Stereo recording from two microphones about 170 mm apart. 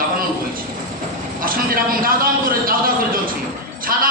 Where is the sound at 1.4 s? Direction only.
55° right (ahead or behind).